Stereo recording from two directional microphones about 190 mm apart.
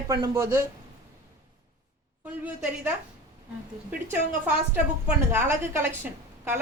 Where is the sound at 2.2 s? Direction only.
10° right (ahead or behind).